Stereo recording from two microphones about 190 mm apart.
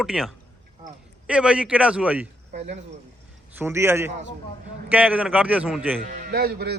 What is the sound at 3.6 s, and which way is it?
A man's voice, 15° right (ahead or behind).